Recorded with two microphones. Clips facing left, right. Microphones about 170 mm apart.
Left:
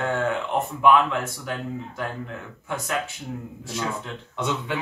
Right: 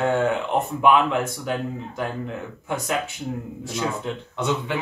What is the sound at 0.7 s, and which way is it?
Speech, 20° right (ahead or behind).